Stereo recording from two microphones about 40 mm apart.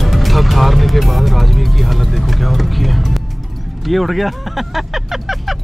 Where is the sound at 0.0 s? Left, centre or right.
Centre.